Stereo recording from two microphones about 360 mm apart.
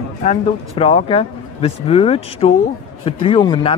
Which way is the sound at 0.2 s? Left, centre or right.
Centre.